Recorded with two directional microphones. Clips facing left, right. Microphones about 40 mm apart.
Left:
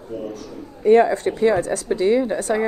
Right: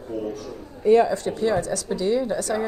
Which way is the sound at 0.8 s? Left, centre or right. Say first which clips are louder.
Left 3 dB; left.